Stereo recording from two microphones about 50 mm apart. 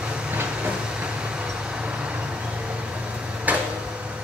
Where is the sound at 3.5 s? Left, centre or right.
Right.